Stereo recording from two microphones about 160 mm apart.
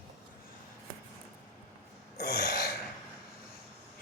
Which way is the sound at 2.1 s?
80° left.